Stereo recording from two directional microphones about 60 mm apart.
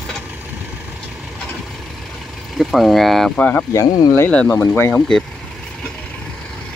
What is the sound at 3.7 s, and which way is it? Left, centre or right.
Speech, left.